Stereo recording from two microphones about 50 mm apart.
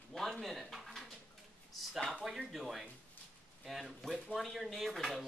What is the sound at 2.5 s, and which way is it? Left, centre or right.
Speech, centre.